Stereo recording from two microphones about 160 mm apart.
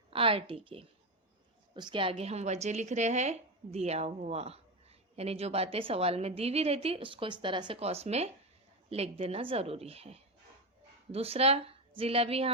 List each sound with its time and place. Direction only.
0.1 s a woman's voice: 35° right (ahead or behind)